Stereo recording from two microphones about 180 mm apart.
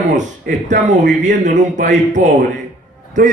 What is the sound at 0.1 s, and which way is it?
Speech, 45° right (ahead or behind).